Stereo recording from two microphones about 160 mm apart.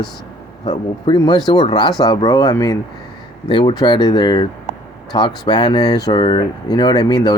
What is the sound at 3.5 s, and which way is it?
Speech, 30° left (ahead or behind).